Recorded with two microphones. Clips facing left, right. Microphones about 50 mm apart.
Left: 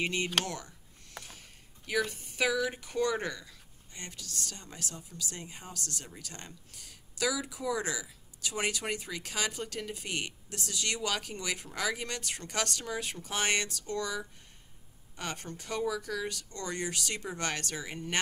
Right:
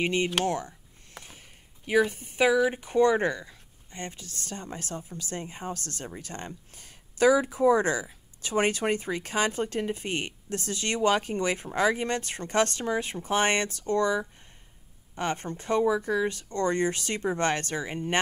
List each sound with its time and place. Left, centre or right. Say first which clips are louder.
0.0 s speech: right 6 dB; right